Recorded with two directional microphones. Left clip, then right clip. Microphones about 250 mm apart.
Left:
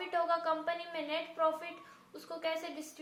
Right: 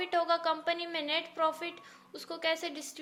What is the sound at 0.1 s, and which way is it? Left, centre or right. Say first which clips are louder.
A woman's voice: right 2 dB; right.